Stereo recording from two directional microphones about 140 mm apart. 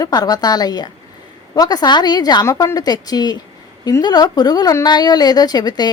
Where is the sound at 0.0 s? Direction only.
25° left (ahead or behind).